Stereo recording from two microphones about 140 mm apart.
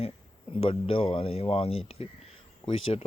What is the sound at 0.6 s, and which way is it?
Speech, 40° left (ahead or behind).